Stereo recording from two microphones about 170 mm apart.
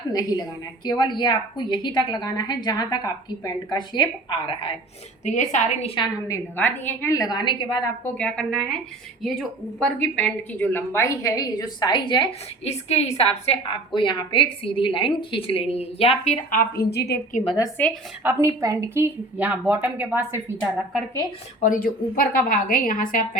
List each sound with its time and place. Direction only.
0.1 s a woman's voice: 20° left (ahead or behind)
5.2 s a woman's voice: 45° left (ahead or behind)
6.2 s a woman's voice: 15° left (ahead or behind)
8.0 s speech: 5° left (ahead or behind)
9.8 s a woman's voice: 5° left (ahead or behind); by 17.2 s 70° left (ahead or behind)
17.4 s a woman's voice: 30° left (ahead or behind)
18.2 s a woman's voice: 15° right (ahead or behind)
21.6 s a woman's voice: 55° left (ahead or behind)